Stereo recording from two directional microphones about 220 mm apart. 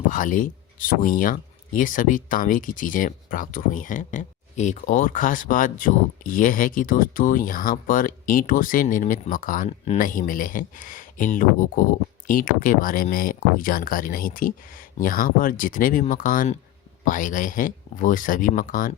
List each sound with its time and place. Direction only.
0.1 s speech: 35° left (ahead or behind)